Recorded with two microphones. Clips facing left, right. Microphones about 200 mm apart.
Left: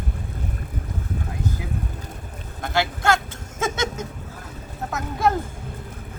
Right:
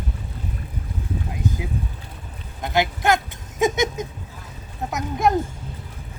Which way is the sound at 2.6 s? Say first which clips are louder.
Right 2 dB; 15° right (ahead or behind).